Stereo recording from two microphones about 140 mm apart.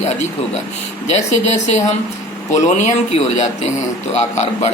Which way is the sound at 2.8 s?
50° left (ahead or behind).